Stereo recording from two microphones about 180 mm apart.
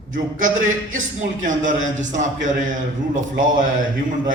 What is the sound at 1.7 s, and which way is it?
A man's voice, 45° right (ahead or behind).